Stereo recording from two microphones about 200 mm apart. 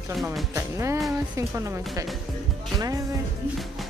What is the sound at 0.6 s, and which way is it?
Speech, 15° right (ahead or behind).